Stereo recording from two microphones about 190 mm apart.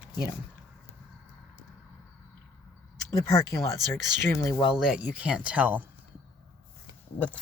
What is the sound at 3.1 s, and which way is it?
Speech, 15° left (ahead or behind).